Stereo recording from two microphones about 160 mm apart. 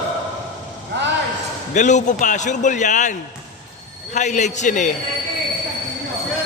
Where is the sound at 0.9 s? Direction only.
90° right.